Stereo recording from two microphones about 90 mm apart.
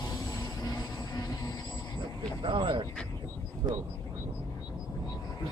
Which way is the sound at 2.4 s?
70° right (ahead or behind).